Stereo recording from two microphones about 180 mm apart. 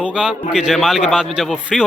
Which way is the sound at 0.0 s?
5° right (ahead or behind).